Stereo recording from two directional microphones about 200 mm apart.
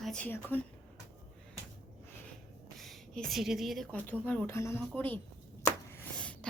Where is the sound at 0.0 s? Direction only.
5° left (ahead or behind).